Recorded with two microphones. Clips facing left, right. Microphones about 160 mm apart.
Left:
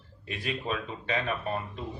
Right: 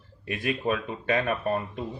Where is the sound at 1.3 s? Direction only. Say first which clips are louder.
Right 5 dB; 50° right (ahead or behind).